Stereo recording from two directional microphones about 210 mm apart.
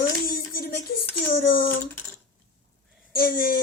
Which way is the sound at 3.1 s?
45° left (ahead or behind).